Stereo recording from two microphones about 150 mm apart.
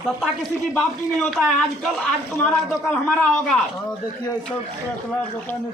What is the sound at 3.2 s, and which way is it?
Speech, 5° left (ahead or behind).